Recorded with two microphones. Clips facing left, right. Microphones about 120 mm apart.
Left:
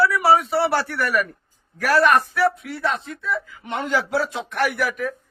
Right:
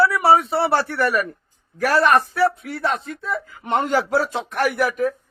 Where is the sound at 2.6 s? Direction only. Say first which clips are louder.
Right 1 dB; 45° right (ahead or behind).